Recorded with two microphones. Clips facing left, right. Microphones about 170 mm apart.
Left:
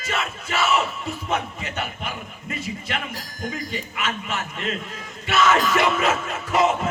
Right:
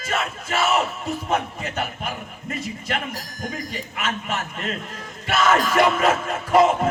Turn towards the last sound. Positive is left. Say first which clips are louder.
# right 4 dB
turn(degrees=-50)  # may be behind; listen again after turning